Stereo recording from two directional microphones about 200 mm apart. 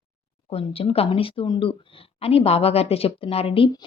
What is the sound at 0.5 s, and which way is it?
A woman's voice, 30° left (ahead or behind).